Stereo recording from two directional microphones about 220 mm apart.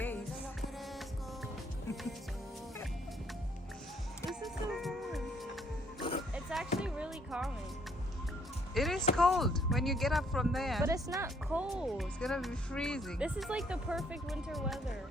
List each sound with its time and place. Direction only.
4.3 s music: centre (ahead or behind)
6.0 s music: 25° left (ahead or behind)
6.3 s a sound: centre (ahead or behind)
6.7 s music: 5° right (ahead or behind)
8.7 s music: centre (ahead or behind)
9.1 s speech: centre (ahead or behind)
10.8 s speech: 15° right (ahead or behind)